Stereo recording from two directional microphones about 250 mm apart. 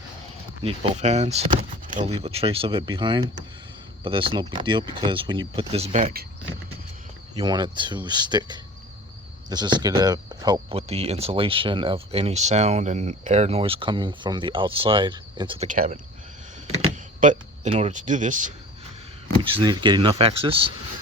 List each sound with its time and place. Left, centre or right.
0.6 s speech: right
7.3 s speech: centre
17.2 s speech: right
19.5 s speech: centre